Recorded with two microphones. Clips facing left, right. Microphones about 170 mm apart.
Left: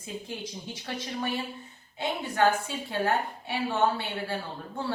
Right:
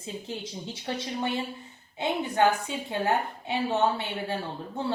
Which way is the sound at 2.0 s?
20° right (ahead or behind).